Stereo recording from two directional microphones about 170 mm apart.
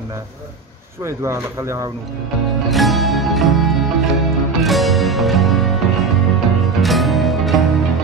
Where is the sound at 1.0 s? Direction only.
15° right (ahead or behind).